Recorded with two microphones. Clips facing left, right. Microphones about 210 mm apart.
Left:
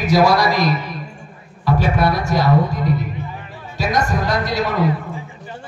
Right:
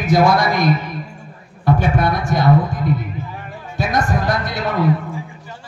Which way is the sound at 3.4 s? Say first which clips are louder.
Even; 55° right (ahead or behind).